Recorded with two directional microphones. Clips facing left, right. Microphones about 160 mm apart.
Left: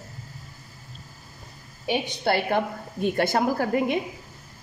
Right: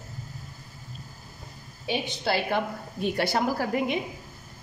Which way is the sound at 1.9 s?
55° left (ahead or behind).